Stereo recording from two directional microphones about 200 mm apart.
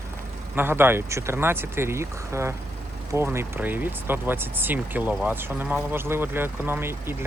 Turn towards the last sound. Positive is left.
turn(degrees=-10)  # may be behind; listen again after turning